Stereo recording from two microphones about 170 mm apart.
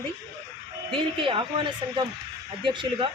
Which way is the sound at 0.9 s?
30° right (ahead or behind).